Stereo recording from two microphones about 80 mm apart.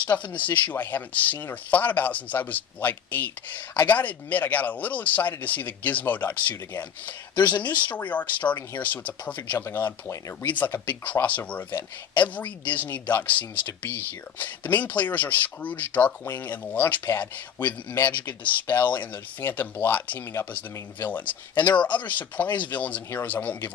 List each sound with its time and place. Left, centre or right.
0.0 s speech: centre
7.3 s speech: left
7.8 s speech: centre
21.5 s speech: left
21.9 s speech: centre